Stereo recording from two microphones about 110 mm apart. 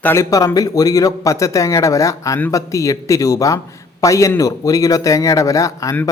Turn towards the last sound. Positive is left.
turn(degrees=30)  # may be behind; listen again after turning